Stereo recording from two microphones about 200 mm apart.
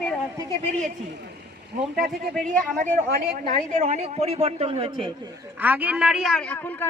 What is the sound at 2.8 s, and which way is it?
A man's voice, 40° right (ahead or behind).